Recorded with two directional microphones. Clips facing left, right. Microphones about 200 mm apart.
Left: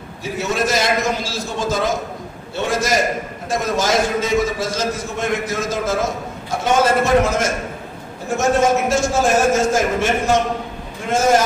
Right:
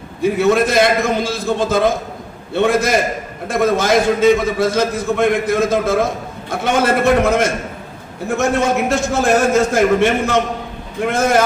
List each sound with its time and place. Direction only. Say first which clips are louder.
0.2 s a man's voice: right 8 dB; 55° right (ahead or behind)
11.1 s a man's voice: even; 60° right (ahead or behind)